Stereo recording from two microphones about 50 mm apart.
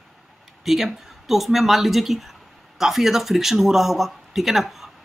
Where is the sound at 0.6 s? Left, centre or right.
Centre.